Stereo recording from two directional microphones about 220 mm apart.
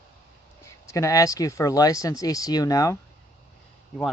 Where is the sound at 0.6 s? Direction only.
15° left (ahead or behind).